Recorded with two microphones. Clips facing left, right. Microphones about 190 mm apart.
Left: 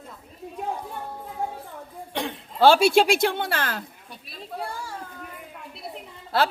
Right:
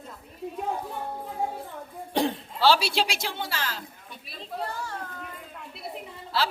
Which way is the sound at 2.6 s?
50° left (ahead or behind).